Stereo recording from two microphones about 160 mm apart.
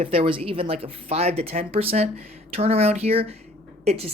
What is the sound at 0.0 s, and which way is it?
Speech, 35° right (ahead or behind).